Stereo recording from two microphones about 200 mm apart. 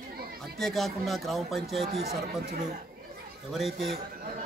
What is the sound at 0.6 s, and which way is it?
Speech, centre (ahead or behind).